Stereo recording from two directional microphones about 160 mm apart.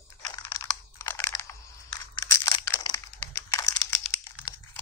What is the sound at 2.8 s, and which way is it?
Computer keyboard, 20° left (ahead or behind).